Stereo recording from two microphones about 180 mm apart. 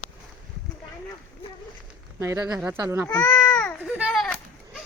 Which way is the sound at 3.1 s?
10° left (ahead or behind).